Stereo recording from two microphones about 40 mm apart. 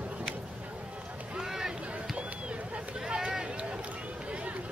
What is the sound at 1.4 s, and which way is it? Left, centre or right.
Boat, centre.